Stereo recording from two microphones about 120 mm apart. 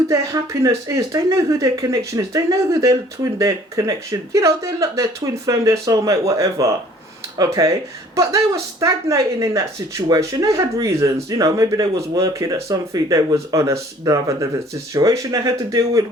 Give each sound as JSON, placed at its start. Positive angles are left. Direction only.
{"t": 0.1, "sound": "speech", "side_deg": -25}